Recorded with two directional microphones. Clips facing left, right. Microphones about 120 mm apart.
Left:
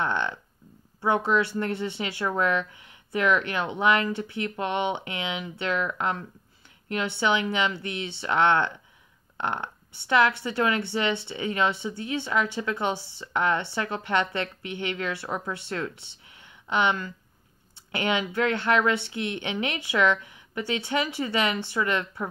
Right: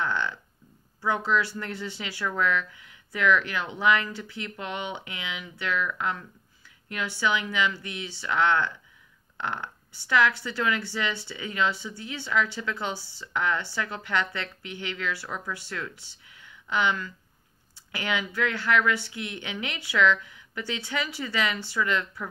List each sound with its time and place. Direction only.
0.0 s speech: 20° left (ahead or behind)